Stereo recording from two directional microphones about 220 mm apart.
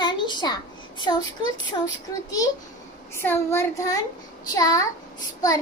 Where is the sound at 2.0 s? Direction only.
15° left (ahead or behind).